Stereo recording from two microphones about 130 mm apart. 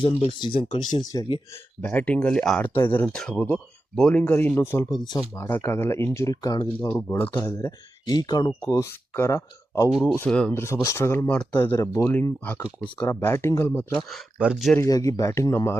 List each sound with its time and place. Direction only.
0.0 s speech: 40° left (ahead or behind)
1.5 s speech: 15° left (ahead or behind)
2.6 s speech: 15° left (ahead or behind)
7.2 s speech: 20° left (ahead or behind)
10.2 s speech: 5° left (ahead or behind)
10.5 s speech: 20° left (ahead or behind)
14.1 s speech: 5° right (ahead or behind)
14.8 s speech: 25° left (ahead or behind)